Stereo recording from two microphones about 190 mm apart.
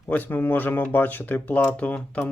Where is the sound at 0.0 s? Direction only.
10° left (ahead or behind).